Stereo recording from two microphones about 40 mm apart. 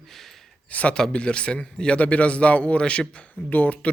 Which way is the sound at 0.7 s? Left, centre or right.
Left.